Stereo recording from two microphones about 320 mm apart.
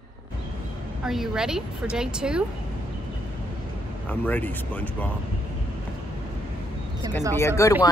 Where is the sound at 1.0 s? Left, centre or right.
Centre.